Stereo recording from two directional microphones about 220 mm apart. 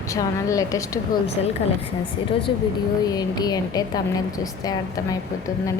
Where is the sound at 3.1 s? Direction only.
15° left (ahead or behind).